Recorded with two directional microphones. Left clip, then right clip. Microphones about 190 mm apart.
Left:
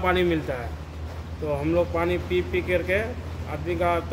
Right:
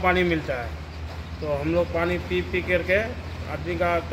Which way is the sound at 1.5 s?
25° left (ahead or behind).